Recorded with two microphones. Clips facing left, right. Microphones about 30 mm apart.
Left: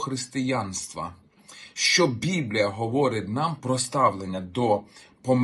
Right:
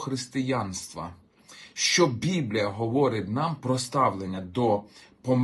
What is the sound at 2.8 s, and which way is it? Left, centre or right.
Speech, left.